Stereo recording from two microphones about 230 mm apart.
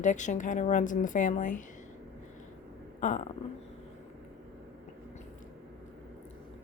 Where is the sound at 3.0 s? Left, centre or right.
Left.